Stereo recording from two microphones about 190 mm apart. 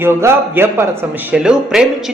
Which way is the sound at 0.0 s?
10° right (ahead or behind).